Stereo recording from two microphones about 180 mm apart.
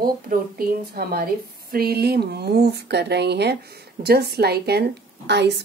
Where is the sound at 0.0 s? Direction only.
55° right (ahead or behind).